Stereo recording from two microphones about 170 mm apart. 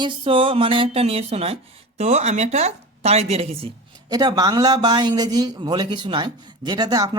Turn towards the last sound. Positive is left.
turn(degrees=-25)  # may be behind; listen again after turning